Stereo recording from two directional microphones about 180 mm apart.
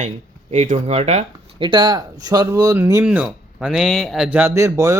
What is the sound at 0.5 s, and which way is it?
Speech, 35° right (ahead or behind).